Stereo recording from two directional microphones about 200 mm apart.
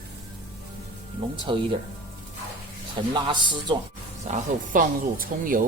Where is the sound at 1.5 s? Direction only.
25° right (ahead or behind).